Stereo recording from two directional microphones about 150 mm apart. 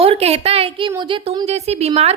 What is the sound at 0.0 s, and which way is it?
A woman's voice, 40° right (ahead or behind).